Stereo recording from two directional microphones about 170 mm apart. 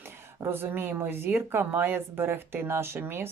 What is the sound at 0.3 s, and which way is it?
Speech, 15° right (ahead or behind).